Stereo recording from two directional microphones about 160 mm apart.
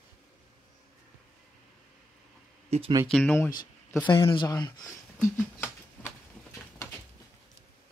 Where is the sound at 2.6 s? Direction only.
40° right (ahead or behind).